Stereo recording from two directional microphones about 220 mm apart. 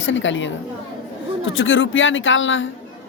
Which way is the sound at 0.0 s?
60° left (ahead or behind).